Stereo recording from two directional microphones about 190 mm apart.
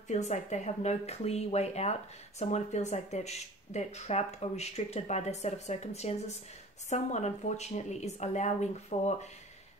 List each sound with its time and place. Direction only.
0.1 s speech: 35° left (ahead or behind)